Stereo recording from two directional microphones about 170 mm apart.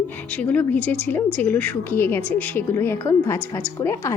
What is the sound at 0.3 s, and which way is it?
A woman's voice, 10° left (ahead or behind).